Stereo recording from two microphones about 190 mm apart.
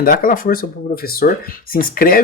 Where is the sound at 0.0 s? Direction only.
50° left (ahead or behind).